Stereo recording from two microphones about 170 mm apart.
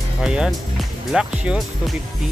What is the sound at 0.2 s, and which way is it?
Speech, 5° right (ahead or behind).